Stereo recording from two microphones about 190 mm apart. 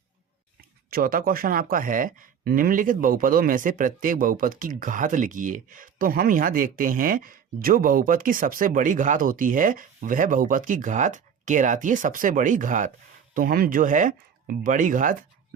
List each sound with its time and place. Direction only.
0.9 s speech: 50° right (ahead or behind)